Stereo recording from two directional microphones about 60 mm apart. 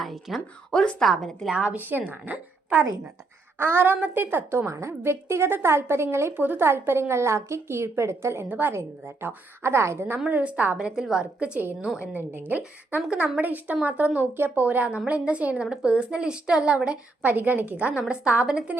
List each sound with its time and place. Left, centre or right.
0.0 s a woman's voice: centre
1.5 s a woman's voice: right
3.6 s a woman's voice: right
6.3 s a woman's voice: right
8.4 s a woman's voice: right
8.7 s a woman's voice: right
10.2 s a woman's voice: right
10.8 s a woman's voice: centre
15.6 s speech: centre
17.2 s a woman's voice: right